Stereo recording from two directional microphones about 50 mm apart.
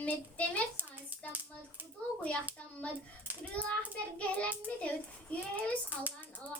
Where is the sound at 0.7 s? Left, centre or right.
Right.